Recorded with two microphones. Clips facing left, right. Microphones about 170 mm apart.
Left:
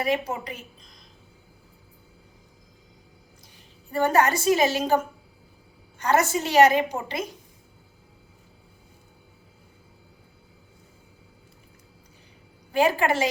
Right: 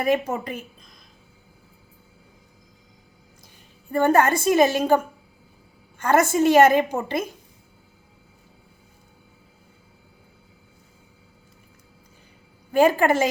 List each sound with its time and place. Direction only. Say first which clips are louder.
0.0 s a woman's voice: right 4 dB; 50° right (ahead or behind)
3.9 s a woman's voice: right 3 dB; 55° right (ahead or behind)
6.0 s a woman's voice: right 4 dB; 50° right (ahead or behind)
12.7 s a woman's voice: right 4 dB; 45° right (ahead or behind)